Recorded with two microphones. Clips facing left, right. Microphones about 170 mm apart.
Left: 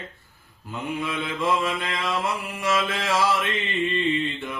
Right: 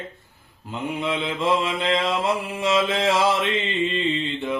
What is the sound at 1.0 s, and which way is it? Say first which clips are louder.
Mantra: right 3 dB; 25° right (ahead or behind).